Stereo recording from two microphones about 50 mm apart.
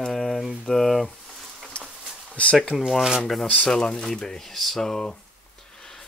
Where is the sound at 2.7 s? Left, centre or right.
Centre.